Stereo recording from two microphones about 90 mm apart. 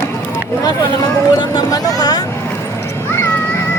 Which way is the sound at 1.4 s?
45° left (ahead or behind).